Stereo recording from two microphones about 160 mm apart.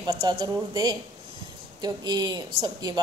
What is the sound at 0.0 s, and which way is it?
A woman's voice, 30° right (ahead or behind).